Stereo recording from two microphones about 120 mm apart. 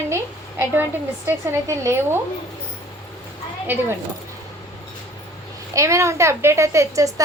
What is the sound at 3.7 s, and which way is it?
Speech, 15° right (ahead or behind).